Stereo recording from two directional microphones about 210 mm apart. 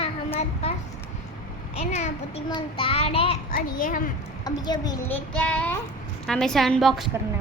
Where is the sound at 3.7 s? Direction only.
40° left (ahead or behind).